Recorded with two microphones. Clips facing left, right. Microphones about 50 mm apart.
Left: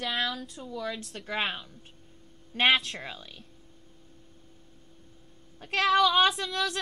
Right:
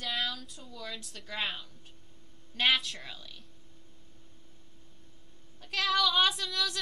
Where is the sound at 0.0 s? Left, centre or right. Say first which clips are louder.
Left 4 dB; left.